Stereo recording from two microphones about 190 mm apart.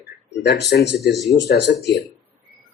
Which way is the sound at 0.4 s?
60° left (ahead or behind).